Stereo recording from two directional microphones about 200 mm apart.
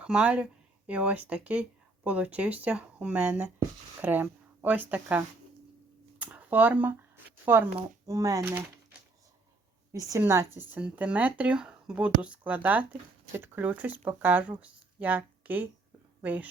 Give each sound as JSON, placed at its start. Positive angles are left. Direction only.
{"t": 0.0, "sound": "speech", "side_deg": -5}
{"t": 6.1, "sound": "a sound", "side_deg": -10}
{"t": 7.5, "sound": "speech", "side_deg": -10}
{"t": 8.4, "sound": "speech", "side_deg": -5}
{"t": 10.1, "sound": "speech", "side_deg": -15}